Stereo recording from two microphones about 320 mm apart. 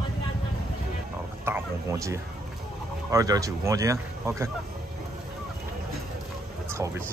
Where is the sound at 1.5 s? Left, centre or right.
Centre.